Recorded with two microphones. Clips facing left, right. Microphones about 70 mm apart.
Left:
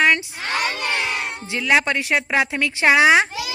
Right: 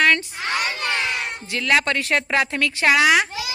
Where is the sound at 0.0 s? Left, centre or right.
Centre.